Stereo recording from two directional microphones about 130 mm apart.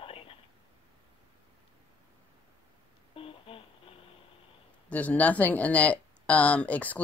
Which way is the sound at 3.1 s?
45° left (ahead or behind).